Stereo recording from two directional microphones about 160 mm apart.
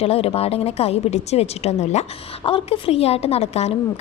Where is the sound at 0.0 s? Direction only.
40° left (ahead or behind).